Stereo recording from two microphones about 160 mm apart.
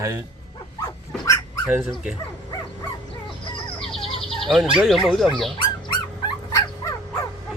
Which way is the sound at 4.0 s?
35° left (ahead or behind).